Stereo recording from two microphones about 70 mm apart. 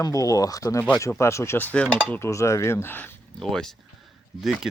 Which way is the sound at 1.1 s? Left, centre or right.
Left.